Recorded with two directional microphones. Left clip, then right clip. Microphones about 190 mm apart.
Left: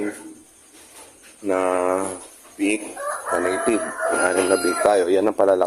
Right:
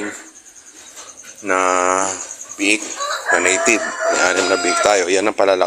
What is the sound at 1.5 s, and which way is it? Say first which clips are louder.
Speech: right 5 dB; centre (ahead or behind).